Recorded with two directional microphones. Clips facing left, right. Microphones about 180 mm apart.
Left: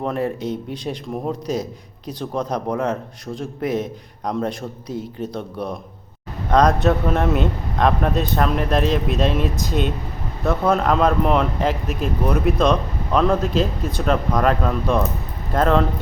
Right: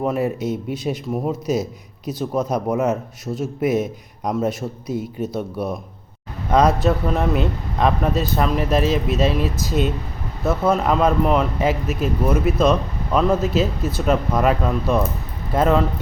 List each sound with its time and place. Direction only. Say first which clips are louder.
0.0 s a man's voice: right 2 dB; 5° right (ahead or behind)